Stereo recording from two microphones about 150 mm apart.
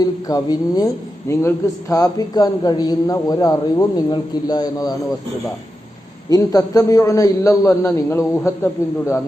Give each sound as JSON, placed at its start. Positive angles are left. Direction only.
{"t": 0.0, "sound": "a man's voice", "side_deg": 25}
{"t": 6.3, "sound": "a man's voice", "side_deg": 25}